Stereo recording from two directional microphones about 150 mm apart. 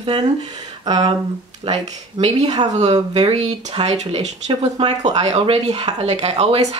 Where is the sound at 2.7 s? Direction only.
50° right (ahead or behind).